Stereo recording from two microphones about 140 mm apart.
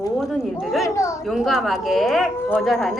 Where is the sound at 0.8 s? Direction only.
20° left (ahead or behind).